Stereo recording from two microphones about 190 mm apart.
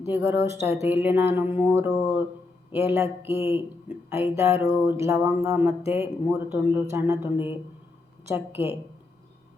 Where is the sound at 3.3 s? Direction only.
30° left (ahead or behind).